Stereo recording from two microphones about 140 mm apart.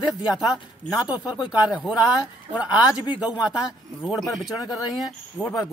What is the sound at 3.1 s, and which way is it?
Speech, 10° right (ahead or behind).